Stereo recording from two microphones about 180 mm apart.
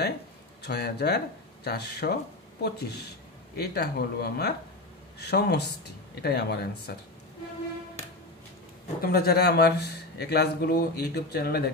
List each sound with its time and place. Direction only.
0.6 s speech: 65° left (ahead or behind)
9.0 s speech: 60° left (ahead or behind)